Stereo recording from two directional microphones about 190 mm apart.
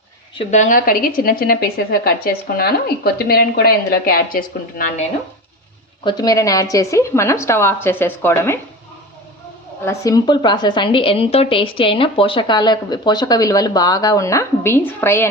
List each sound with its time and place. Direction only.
0.5 s a woman's voice: 40° left (ahead or behind)
6.1 s a woman's voice: 20° left (ahead or behind)
9.8 s a woman's voice: 15° left (ahead or behind)